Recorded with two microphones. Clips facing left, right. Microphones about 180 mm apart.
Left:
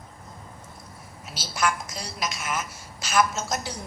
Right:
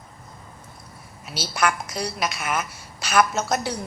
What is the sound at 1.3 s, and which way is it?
A woman's voice, 65° right (ahead or behind).